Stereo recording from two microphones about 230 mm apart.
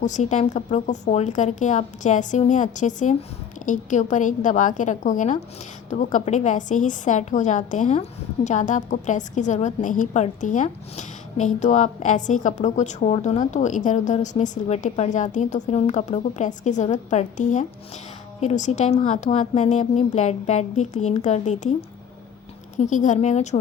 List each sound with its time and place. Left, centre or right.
0.0 s a woman's voice: left